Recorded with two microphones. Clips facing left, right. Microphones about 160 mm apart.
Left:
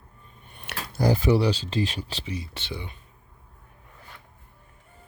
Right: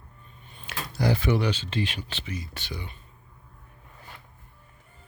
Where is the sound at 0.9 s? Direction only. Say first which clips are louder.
Left 3 dB; 40° left (ahead or behind); by 2.9 s 25° left (ahead or behind).